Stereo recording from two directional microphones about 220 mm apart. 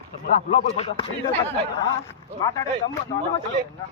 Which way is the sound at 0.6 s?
25° left (ahead or behind).